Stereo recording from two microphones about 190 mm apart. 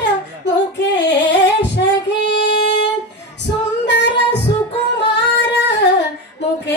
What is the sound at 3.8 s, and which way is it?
Female singing, 65° left (ahead or behind).